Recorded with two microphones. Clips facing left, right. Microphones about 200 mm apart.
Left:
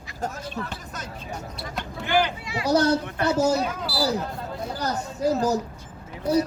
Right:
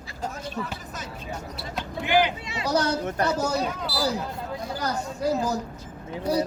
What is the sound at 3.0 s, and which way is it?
Speech, 40° right (ahead or behind).